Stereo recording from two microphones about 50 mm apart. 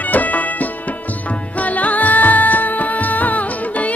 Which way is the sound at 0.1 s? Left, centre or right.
Left.